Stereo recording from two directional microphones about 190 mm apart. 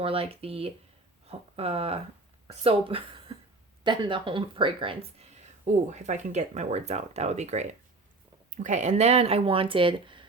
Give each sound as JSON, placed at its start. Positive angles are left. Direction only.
{"t": 0.0, "sound": "speech", "side_deg": -30}
{"t": 5.6, "sound": "speech", "side_deg": -40}